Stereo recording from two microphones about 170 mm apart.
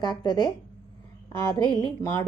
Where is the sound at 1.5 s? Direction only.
25° left (ahead or behind).